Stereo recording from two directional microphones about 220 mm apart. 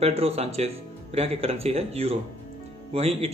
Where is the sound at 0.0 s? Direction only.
30° right (ahead or behind).